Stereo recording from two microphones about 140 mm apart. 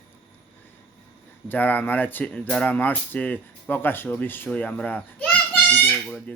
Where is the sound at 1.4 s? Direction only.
15° left (ahead or behind).